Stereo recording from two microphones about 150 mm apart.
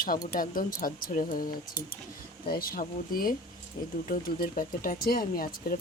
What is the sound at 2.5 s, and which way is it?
Speech, 75° left (ahead or behind).